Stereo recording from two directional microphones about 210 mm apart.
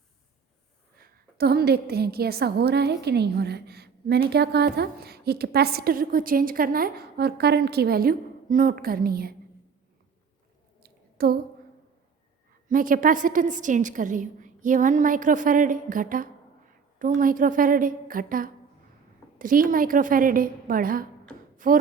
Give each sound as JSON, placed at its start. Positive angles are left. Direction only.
{"t": 0.9, "sound": "a woman's voice", "side_deg": -45}
{"t": 10.8, "sound": "a sound", "side_deg": -45}
{"t": 12.6, "sound": "a woman's voice", "side_deg": -40}